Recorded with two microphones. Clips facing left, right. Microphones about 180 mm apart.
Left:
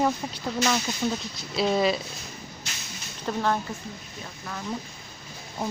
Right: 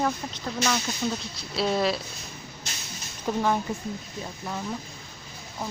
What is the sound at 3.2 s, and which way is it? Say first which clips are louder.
Speech: right 1 dB; 10° right (ahead or behind).